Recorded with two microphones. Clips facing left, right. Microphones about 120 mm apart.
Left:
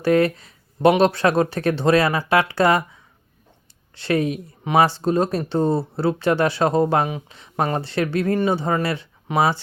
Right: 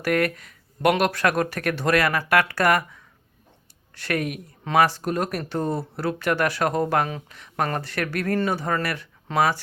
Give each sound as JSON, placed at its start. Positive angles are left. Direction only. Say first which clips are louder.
{"t": 0.0, "sound": "speech", "louder": "left 5 dB", "side_deg": 25}